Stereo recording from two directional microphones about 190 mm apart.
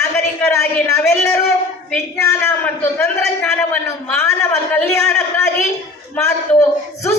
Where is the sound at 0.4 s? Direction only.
15° left (ahead or behind).